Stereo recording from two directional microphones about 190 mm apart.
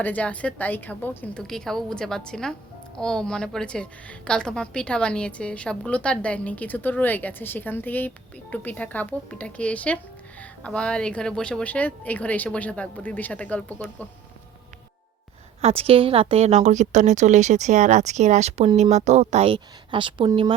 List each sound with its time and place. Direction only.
0.0 s a woman's voice: 10° left (ahead or behind)
15.6 s a woman's voice: 30° right (ahead or behind)